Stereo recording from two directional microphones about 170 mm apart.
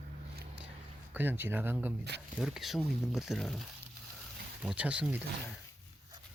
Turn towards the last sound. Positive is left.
turn(degrees=-5)  # may be behind; listen again after turning